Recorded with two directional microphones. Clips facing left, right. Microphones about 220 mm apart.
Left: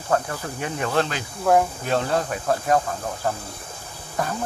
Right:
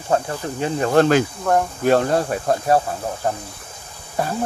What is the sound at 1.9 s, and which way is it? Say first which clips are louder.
Speech: right 6 dB; 45° right (ahead or behind).